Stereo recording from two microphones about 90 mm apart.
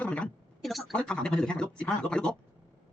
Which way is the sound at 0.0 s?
15° left (ahead or behind).